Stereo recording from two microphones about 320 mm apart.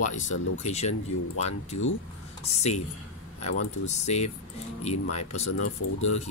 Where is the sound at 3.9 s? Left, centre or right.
Left.